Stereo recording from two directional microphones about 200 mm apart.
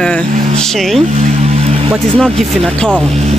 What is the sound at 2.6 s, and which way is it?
Speech, 5° left (ahead or behind).